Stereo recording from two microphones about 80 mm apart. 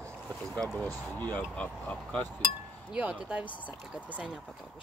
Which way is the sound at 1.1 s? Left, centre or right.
Left.